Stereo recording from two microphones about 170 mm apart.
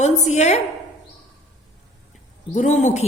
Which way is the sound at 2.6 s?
45° left (ahead or behind).